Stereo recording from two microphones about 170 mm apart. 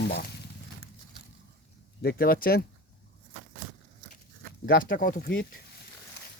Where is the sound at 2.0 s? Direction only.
65° left (ahead or behind).